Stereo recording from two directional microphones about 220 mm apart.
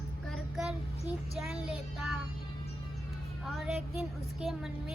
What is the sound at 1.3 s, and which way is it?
Speech, centre (ahead or behind).